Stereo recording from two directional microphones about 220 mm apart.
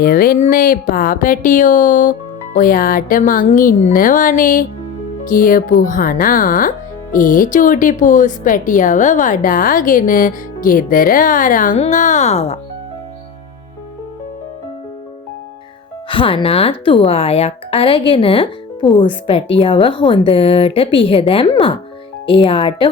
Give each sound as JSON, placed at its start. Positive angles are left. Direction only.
{"t": 0.0, "sound": "speech", "side_deg": 40}
{"t": 16.0, "sound": "a woman's voice", "side_deg": 25}